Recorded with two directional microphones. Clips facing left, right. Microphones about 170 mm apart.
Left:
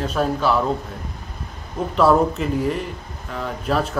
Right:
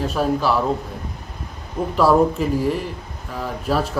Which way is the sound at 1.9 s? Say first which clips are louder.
Right 1 dB; 5° right (ahead or behind).